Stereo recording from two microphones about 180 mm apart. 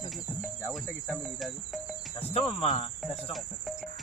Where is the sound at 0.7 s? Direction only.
Centre (ahead or behind).